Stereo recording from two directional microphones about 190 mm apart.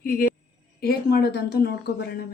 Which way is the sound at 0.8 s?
55° left (ahead or behind).